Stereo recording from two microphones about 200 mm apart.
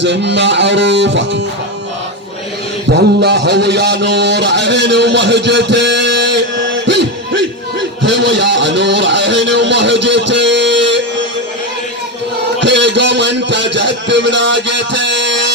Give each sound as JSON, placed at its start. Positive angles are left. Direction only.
{"t": 0.0, "sound": "music", "side_deg": -60}
{"t": 2.9, "sound": "a man's voice", "side_deg": -60}
{"t": 12.5, "sound": "a sound", "side_deg": -60}